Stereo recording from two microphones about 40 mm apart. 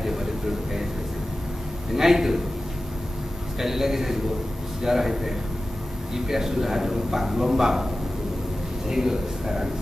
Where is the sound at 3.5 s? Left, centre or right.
Centre.